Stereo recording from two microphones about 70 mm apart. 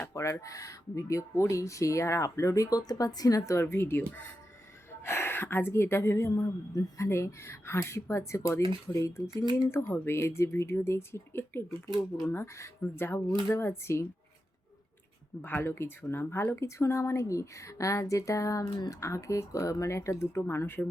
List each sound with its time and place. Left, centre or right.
0.1 s speech: left
3.6 s a woman's voice: left
4.9 s a woman's voice: left
15.4 s a woman's voice: left